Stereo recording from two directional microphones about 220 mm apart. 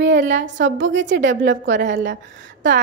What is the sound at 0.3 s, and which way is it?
A woman's voice, 55° right (ahead or behind).